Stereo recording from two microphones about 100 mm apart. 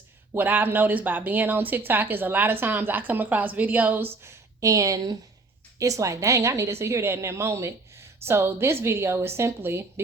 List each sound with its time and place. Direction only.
0.3 s a woman's voice: 20° right (ahead or behind)